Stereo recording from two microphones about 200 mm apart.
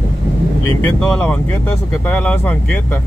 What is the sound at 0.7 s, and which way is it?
Speech, 5° left (ahead or behind).